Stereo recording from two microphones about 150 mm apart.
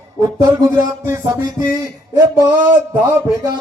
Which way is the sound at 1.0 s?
20° right (ahead or behind).